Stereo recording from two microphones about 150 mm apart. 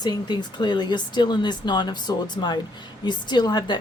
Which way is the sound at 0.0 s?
30° left (ahead or behind).